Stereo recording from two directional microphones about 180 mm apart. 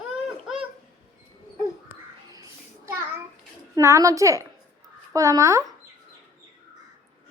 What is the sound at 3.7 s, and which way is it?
Speech, 20° right (ahead or behind).